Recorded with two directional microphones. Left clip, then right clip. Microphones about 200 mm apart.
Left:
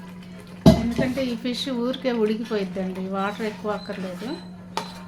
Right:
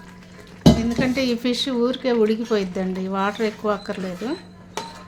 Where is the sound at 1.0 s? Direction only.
35° right (ahead or behind).